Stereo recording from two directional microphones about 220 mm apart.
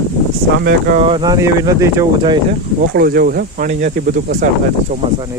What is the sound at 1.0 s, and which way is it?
Speech, 20° right (ahead or behind).